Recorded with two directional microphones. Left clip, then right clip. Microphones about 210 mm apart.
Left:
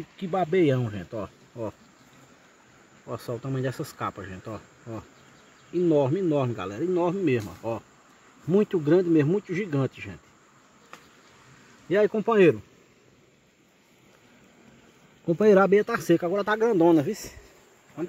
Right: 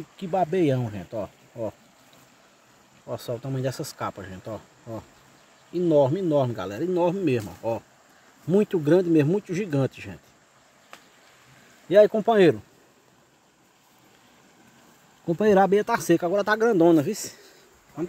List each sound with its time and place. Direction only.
0.3 s speech: 15° right (ahead or behind)
3.1 s speech: 10° right (ahead or behind)
11.9 s speech: 20° right (ahead or behind)
15.2 s speech: 15° right (ahead or behind)